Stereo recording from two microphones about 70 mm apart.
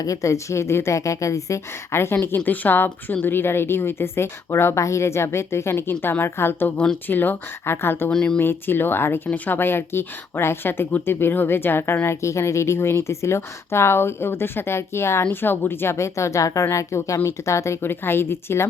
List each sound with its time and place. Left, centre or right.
0.0 s a woman's voice: left
2.2 s a woman's voice: left
6.7 s speech: centre
7.1 s speech: left
8.1 s speech: centre
8.4 s a woman's voice: left
12.0 s a woman's voice: left
17.8 s a woman's voice: left